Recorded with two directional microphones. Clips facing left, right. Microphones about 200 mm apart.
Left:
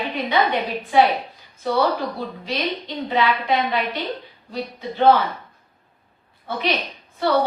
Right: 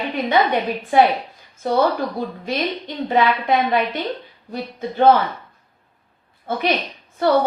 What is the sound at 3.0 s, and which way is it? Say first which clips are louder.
Speech: right 3 dB; 50° right (ahead or behind).